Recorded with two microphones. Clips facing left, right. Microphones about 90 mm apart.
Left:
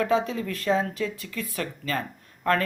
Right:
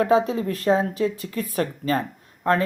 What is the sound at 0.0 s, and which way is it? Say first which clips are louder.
Speech: right 5 dB; 35° right (ahead or behind).